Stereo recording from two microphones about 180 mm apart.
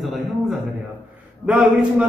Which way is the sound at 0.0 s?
Centre (ahead or behind).